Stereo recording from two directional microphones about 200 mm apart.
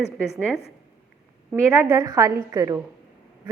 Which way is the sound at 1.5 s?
10° right (ahead or behind).